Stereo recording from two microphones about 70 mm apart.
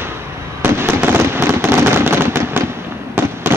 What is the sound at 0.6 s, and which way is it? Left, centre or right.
Fireworks, right.